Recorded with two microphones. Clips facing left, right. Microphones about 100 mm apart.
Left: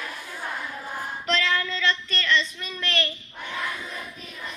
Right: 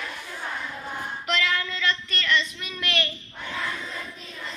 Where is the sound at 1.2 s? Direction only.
35° left (ahead or behind).